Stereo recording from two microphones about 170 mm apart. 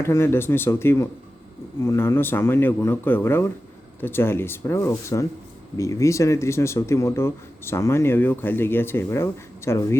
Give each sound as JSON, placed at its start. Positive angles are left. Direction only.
{"t": 0.0, "sound": "speech", "side_deg": 15}